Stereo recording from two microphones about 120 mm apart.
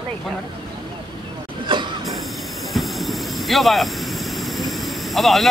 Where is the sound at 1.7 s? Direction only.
40° right (ahead or behind).